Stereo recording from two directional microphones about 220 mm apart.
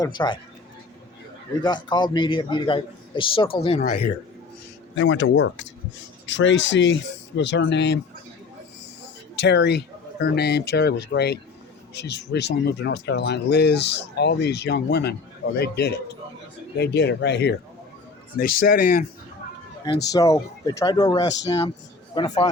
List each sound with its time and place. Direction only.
0.0 s a man's voice: 20° left (ahead or behind)
1.6 s a man's voice: 20° left (ahead or behind)
4.9 s speech: 55° left (ahead or behind)
9.4 s a man's voice: 50° left (ahead or behind)
20.1 s a man's voice: 15° left (ahead or behind)